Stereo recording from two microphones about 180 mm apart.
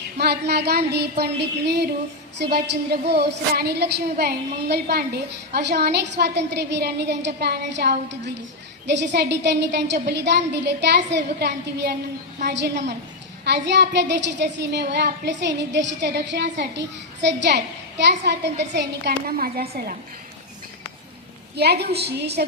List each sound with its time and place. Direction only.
0.2 s a woman's voice: 65° right (ahead or behind)
21.5 s a woman's voice: 65° right (ahead or behind)